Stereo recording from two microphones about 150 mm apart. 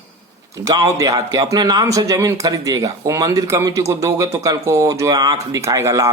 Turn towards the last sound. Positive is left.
turn(degrees=-20)  # may be behind; listen again after turning